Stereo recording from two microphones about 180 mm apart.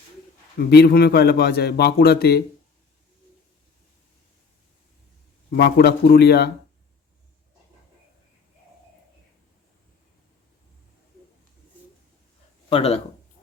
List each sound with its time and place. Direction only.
0.6 s a man's voice: 65° left (ahead or behind)
5.5 s a man's voice: 60° left (ahead or behind)
12.6 s speech: 35° left (ahead or behind)